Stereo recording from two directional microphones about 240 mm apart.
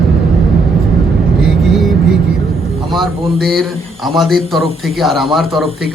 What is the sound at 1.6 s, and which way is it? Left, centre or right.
Vehicle, centre.